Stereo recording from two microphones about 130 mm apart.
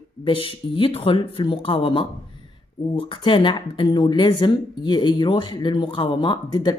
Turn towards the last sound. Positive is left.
turn(degrees=35)  # may be behind; listen again after turning